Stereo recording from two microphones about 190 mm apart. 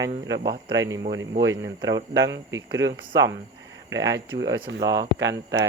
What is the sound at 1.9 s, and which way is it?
Speech, 65° right (ahead or behind).